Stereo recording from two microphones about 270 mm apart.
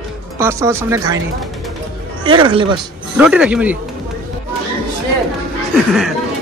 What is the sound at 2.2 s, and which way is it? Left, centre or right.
Speech, centre.